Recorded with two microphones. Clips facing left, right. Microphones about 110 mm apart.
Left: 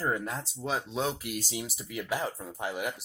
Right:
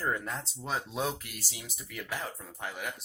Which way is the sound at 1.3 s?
25° left (ahead or behind).